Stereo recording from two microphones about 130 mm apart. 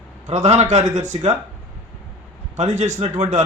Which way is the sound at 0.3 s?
60° right (ahead or behind).